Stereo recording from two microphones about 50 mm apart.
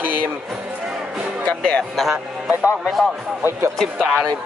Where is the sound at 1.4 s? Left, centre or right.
Left.